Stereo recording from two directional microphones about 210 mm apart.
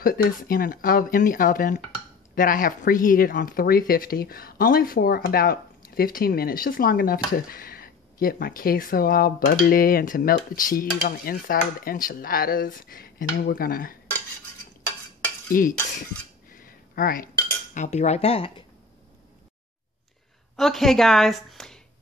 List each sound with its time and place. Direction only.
0.0 s speech: 45° left (ahead or behind)
15.5 s cutlery: 40° left (ahead or behind)
17.7 s speech: 30° left (ahead or behind)
20.5 s a woman's voice: centre (ahead or behind)